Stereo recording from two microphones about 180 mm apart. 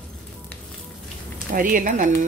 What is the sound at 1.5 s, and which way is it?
Speech, 50° right (ahead or behind).